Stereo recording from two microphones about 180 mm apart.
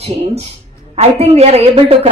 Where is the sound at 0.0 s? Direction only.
35° right (ahead or behind).